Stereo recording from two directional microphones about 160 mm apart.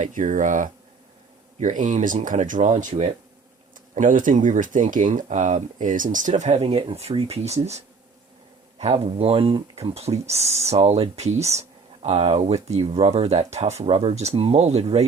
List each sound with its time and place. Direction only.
0.0 s speech: 55° right (ahead or behind)